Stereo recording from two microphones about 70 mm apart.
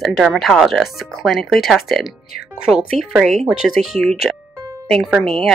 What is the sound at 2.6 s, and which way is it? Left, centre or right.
Speech, centre.